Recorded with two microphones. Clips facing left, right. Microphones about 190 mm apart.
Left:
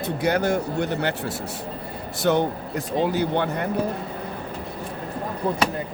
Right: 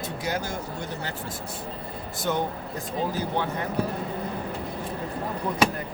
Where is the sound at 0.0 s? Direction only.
60° left (ahead or behind).